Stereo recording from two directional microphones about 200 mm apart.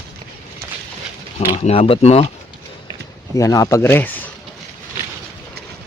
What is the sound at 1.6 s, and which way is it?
Speech, 30° left (ahead or behind).